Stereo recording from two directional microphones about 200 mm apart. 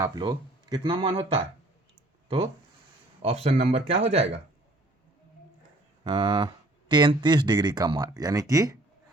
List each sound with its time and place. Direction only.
0.0 s speech: 20° right (ahead or behind)
3.2 s speech: 30° right (ahead or behind)
6.1 s speech: 20° right (ahead or behind)